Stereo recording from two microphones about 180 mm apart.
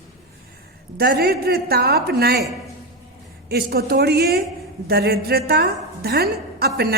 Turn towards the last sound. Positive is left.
turn(degrees=-60)  # may be behind; listen again after turning